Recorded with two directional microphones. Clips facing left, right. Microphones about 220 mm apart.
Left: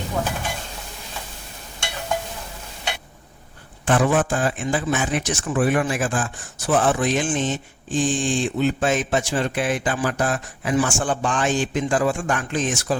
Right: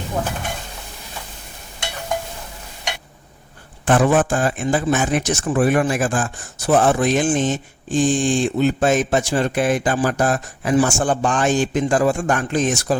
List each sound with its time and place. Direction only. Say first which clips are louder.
3.8 s a man's voice: right 3 dB; 45° right (ahead or behind)